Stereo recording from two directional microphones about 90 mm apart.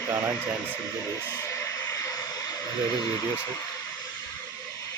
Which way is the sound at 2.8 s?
45° left (ahead or behind).